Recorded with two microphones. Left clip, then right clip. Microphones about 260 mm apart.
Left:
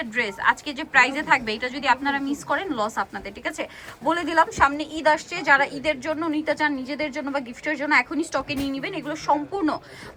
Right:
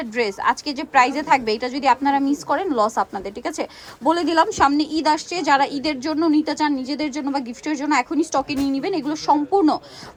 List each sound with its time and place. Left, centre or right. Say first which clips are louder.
0.0 s a woman's voice: right 2 dB; centre